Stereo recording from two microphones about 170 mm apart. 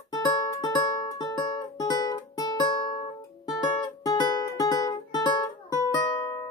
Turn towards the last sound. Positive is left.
turn(degrees=15)  # may be behind; listen again after turning